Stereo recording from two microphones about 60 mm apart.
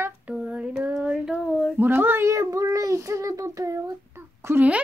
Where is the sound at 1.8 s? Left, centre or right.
Right.